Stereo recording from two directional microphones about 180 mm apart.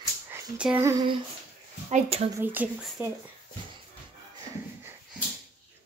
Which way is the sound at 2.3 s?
10° right (ahead or behind).